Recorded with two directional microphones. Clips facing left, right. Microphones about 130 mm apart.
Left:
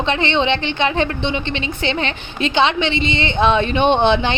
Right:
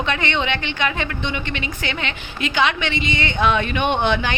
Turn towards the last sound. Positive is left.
turn(degrees=25)  # may be behind; listen again after turning